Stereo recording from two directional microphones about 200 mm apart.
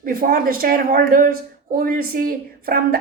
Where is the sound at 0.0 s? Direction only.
45° right (ahead or behind).